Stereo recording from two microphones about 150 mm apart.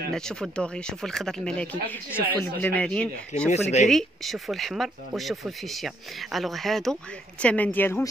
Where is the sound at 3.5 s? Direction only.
50° left (ahead or behind).